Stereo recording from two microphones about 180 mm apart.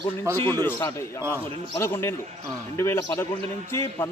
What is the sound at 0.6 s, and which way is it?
A man's voice, 10° left (ahead or behind).